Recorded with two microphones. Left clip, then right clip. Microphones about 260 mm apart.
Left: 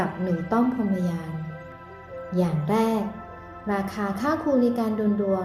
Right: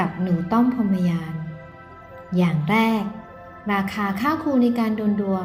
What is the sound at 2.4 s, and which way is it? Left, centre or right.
A woman's voice, right.